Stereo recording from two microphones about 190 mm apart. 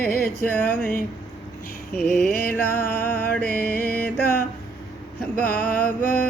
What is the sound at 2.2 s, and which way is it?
Music, 50° left (ahead or behind).